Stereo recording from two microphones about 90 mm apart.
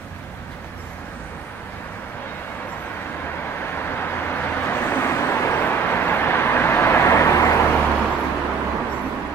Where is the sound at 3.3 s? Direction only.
25° left (ahead or behind).